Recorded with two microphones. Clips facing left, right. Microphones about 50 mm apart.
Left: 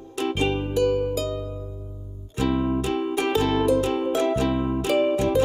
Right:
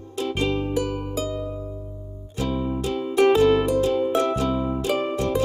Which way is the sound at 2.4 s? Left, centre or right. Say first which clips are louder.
Left 3 dB; left.